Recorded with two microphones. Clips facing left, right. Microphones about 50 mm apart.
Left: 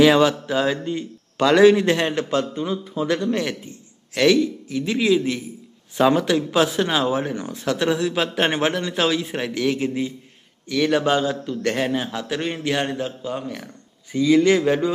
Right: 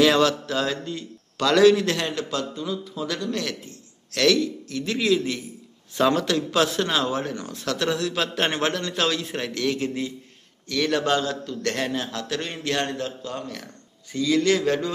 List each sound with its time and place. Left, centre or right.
0.0 s a man's voice: centre